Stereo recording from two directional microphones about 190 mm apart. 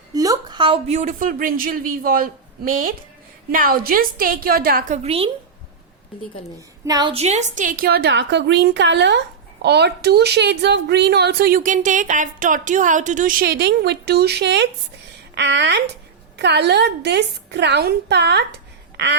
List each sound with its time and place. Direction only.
0.1 s a woman's voice: 20° right (ahead or behind); by 4.9 s 50° right (ahead or behind)
5.0 s a woman's voice: 30° right (ahead or behind)
6.8 s a woman's voice: 20° right (ahead or behind)
7.1 s a woman's voice: 35° right (ahead or behind); by 18.4 s 65° right (ahead or behind)